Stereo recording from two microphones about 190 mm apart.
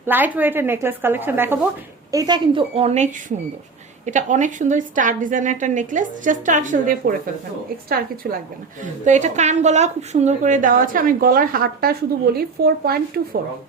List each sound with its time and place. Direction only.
0.0 s speech: 10° right (ahead or behind)
2.1 s a woman's voice: 20° right (ahead or behind); by 8.4 s 50° right (ahead or behind)
8.8 s a woman's voice: 40° right (ahead or behind)